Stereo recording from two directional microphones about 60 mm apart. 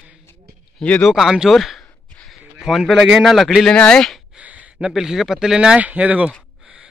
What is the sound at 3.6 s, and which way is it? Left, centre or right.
Speech, centre.